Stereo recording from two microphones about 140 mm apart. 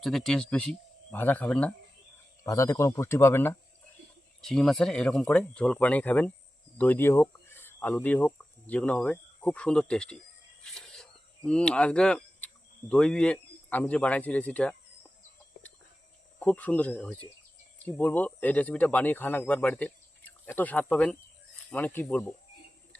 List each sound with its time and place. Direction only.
0.0 s speech: centre (ahead or behind)
2.4 s speech: 25° left (ahead or behind)
4.4 s speech: 5° left (ahead or behind)
10.6 s a sound: 5° left (ahead or behind)
12.9 s speech: 5° left (ahead or behind)
16.4 s speech: 10° left (ahead or behind)